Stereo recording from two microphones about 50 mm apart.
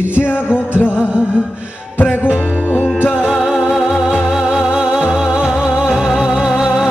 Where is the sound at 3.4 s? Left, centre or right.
Centre.